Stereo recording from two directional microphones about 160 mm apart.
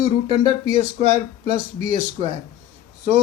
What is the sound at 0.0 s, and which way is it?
Speech, 40° right (ahead or behind).